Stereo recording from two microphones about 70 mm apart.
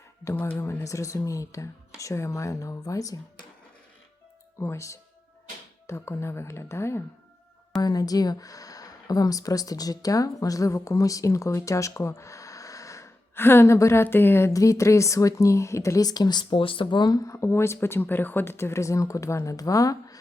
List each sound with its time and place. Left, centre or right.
0.3 s speech: left
0.9 s speech: left
4.6 s speech: left
7.8 s speech: left
13.3 s speech: left
14.5 s speech: left
16.0 s speech: left
17.0 s speech: left
17.2 s speech: left